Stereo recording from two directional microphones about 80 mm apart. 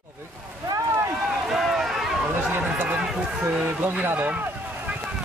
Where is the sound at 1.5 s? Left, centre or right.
Centre.